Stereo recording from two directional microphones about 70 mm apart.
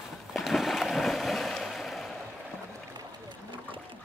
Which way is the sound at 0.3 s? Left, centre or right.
Centre.